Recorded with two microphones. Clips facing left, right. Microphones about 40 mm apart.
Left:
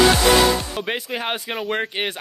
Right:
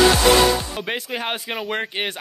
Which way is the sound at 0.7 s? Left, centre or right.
Centre.